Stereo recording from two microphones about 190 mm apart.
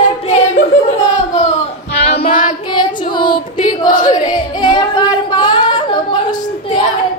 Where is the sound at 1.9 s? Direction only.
35° left (ahead or behind).